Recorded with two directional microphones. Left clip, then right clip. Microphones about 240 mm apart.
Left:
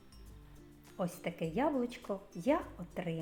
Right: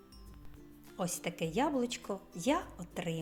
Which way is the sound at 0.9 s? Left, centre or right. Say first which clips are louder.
Right 1 dB; right.